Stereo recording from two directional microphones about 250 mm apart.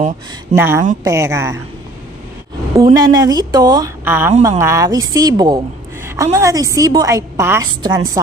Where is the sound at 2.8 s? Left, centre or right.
Centre.